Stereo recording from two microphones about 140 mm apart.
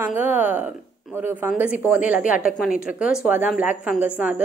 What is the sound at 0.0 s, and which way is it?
Speech, 15° right (ahead or behind).